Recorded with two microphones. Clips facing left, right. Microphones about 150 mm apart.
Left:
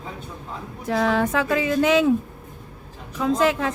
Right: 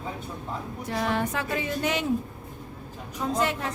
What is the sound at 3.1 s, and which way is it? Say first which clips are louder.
Speech: left 7 dB; 90° left.